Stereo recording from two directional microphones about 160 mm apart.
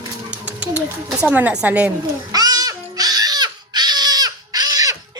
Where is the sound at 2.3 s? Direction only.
25° right (ahead or behind).